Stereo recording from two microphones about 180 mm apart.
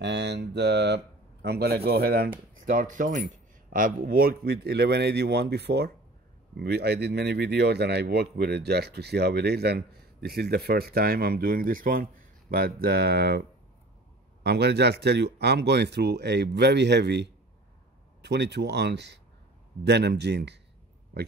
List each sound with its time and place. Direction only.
0.0 s speech: 70° right (ahead or behind)
14.4 s speech: 65° right (ahead or behind)